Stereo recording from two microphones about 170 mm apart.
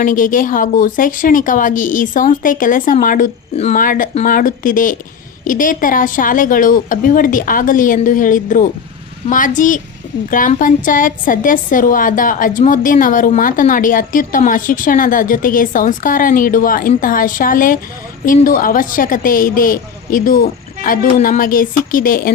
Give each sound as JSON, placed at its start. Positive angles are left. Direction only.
{"t": 0.0, "sound": "a woman's voice", "side_deg": 50}
{"t": 3.5, "sound": "a woman's voice", "side_deg": 40}